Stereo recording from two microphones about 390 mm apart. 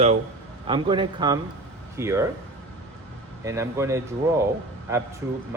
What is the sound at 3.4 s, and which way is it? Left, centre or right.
Speech, centre.